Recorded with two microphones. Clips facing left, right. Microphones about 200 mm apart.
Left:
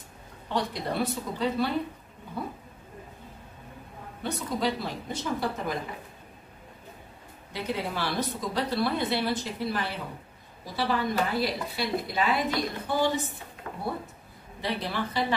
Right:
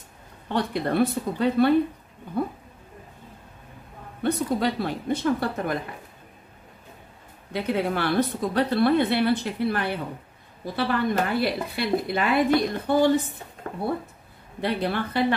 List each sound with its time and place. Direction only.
0.5 s speech: 55° right (ahead or behind)
4.2 s speech: 60° right (ahead or behind)
7.5 s speech: 60° right (ahead or behind)
13.7 s speech: 45° right (ahead or behind)
14.6 s speech: 60° right (ahead or behind)